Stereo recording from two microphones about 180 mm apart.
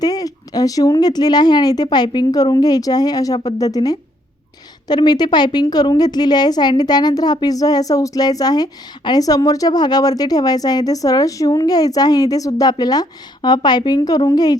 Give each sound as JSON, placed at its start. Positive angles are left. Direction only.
{"t": 0.0, "sound": "a woman's voice", "side_deg": 20}